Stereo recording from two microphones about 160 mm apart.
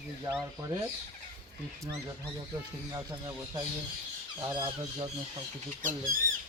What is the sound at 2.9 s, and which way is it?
Speech, 20° right (ahead or behind).